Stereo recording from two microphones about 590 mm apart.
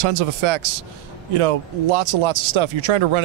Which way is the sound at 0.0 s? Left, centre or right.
Right.